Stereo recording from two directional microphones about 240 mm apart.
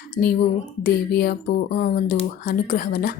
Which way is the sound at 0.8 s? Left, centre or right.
Left.